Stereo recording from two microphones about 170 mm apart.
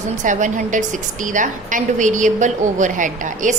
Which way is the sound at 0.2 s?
45° right (ahead or behind).